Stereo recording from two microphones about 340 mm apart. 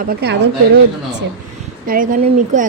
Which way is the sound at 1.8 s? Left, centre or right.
Right.